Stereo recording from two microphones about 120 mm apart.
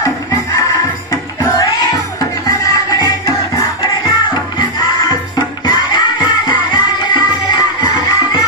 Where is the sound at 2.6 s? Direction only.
30° left (ahead or behind).